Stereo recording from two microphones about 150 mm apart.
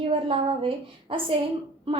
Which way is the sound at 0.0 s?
35° right (ahead or behind).